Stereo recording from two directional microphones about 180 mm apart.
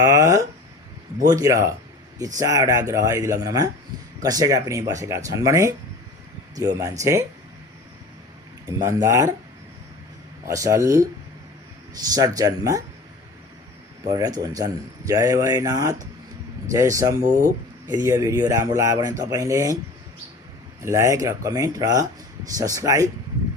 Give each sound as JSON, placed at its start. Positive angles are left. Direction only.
{"t": 0.0, "sound": "a sound", "side_deg": -15}
{"t": 1.3, "sound": "speech", "side_deg": -20}
{"t": 8.6, "sound": "speech", "side_deg": -20}
{"t": 10.5, "sound": "speech", "side_deg": -15}
{"t": 12.1, "sound": "speech", "side_deg": -20}
{"t": 14.1, "sound": "speech", "side_deg": -20}
{"t": 20.8, "sound": "speech", "side_deg": -15}